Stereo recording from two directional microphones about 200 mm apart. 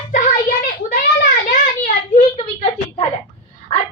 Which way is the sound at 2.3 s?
25° left (ahead or behind).